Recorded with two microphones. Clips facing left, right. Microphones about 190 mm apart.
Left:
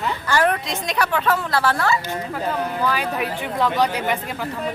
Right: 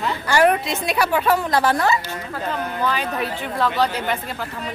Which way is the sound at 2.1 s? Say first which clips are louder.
Left 2 dB; 10° left (ahead or behind).